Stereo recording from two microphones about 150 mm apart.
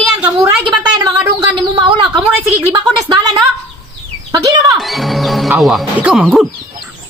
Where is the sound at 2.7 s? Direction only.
25° right (ahead or behind).